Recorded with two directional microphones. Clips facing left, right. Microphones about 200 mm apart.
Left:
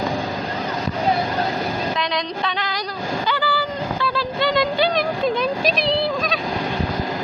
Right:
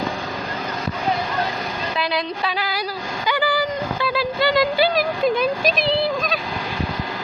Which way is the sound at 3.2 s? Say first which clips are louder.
Right 5 dB; 15° right (ahead or behind).